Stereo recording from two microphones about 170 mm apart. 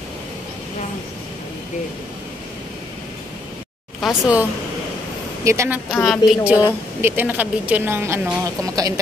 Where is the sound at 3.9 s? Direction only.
5° right (ahead or behind).